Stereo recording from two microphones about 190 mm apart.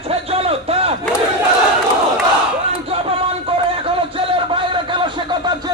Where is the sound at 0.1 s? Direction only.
30° right (ahead or behind).